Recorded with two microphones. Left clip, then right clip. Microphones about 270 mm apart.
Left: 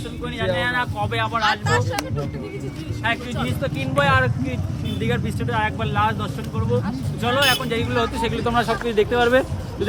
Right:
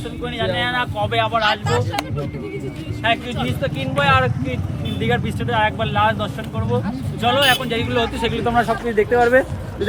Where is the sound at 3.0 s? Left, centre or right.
Centre.